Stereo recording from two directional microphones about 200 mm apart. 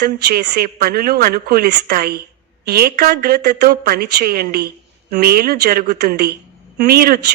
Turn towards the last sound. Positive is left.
turn(degrees=-50)  # may be behind; listen again after turning